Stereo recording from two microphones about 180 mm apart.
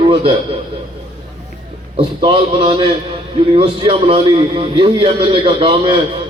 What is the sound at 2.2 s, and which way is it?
A man's voice, 30° right (ahead or behind).